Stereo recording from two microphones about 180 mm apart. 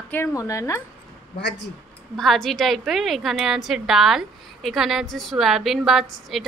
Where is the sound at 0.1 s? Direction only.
15° left (ahead or behind).